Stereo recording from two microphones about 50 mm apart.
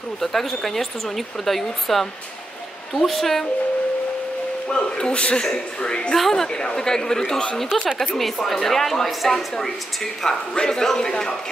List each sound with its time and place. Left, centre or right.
0.2 s speech: centre
4.6 s a woman's voice: centre
6.1 s a woman's voice: centre